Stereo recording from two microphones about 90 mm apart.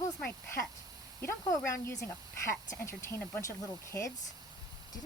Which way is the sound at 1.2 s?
35° left (ahead or behind).